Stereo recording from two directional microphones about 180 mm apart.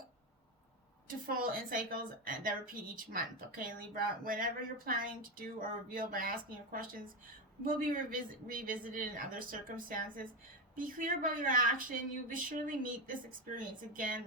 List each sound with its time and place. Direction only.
1.0 s a woman's voice: 55° right (ahead or behind)